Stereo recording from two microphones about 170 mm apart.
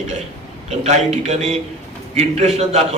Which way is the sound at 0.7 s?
40° right (ahead or behind).